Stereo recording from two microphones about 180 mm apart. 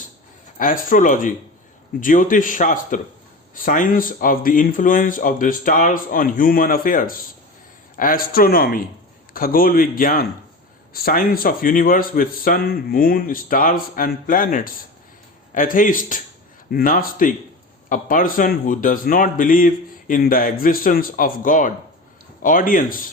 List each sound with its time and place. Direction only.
0.6 s speech: 50° left (ahead or behind)